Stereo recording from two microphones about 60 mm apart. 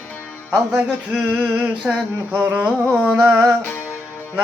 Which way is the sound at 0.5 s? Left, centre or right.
Centre.